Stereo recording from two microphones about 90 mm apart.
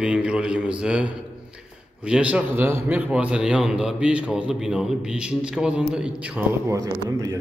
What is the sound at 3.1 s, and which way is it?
A man's voice, 10° right (ahead or behind).